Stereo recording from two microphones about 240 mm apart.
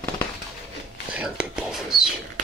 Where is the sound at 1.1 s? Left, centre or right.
Centre.